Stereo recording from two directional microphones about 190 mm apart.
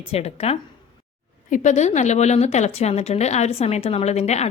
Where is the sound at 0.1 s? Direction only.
35° left (ahead or behind).